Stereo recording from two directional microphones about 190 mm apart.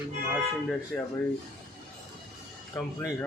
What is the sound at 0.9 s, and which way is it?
Speech, 5° left (ahead or behind).